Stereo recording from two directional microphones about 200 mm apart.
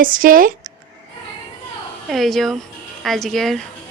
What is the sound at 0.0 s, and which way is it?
Speech, 45° right (ahead or behind).